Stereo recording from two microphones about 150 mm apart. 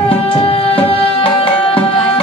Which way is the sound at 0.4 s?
40° left (ahead or behind).